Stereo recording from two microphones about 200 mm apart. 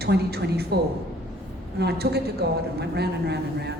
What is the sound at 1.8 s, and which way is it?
A woman's voice, 55° right (ahead or behind).